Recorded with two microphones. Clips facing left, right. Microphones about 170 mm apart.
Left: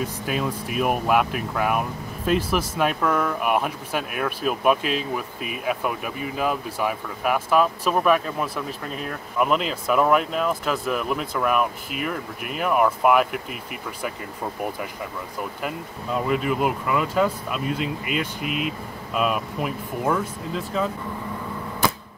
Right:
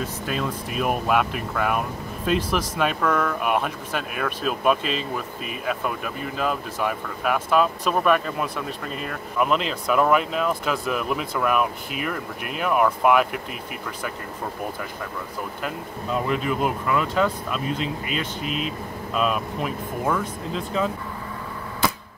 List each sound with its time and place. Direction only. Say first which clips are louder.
0.0 s speech: left 1 dB; 10° left (ahead or behind)
15.6 s speech: even; 5° left (ahead or behind)
18.4 s speech: left 1 dB; 60° left (ahead or behind)
19.1 s speech: even; 5° left (ahead or behind)